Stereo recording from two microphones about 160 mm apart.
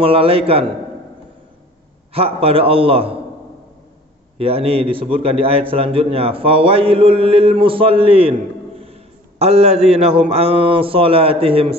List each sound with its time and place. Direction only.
0.0 s a man's voice: 35° right (ahead or behind)
2.1 s a man's voice: 35° right (ahead or behind)
4.4 s a man's voice: 35° right (ahead or behind)